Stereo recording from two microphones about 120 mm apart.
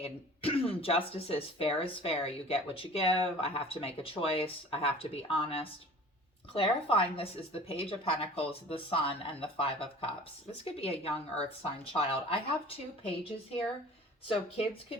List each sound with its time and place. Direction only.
0.0 s speech: 50° left (ahead or behind)
14.3 s speech: 55° left (ahead or behind)